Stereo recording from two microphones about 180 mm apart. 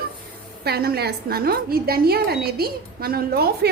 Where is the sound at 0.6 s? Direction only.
60° right (ahead or behind).